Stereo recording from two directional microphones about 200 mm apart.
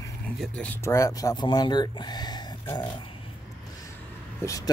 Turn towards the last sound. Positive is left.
turn(degrees=15)  # may be behind; listen again after turning